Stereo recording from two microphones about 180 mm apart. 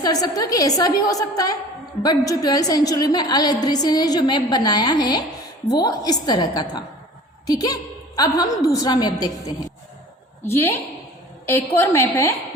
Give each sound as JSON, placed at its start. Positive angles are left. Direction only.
{"t": 0.0, "sound": "a woman's voice", "side_deg": 20}
{"t": 10.4, "sound": "a woman's voice", "side_deg": 15}